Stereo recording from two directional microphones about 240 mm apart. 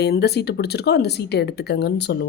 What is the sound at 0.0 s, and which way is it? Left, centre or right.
Speech, left.